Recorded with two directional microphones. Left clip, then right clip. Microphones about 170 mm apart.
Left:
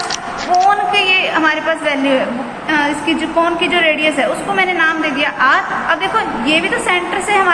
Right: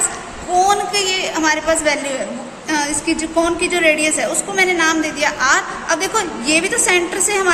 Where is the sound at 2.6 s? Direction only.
50° right (ahead or behind).